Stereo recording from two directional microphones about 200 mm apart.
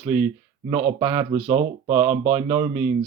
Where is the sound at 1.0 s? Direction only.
25° right (ahead or behind).